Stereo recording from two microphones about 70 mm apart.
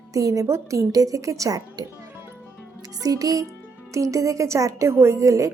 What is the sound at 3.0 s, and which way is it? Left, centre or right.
A woman's voice, right.